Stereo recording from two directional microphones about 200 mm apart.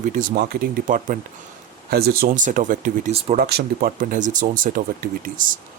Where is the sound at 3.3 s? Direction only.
50° right (ahead or behind).